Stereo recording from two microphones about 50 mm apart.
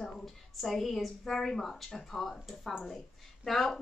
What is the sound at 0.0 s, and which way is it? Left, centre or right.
A woman's voice, centre.